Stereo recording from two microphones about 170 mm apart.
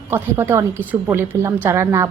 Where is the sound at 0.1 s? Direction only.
15° right (ahead or behind).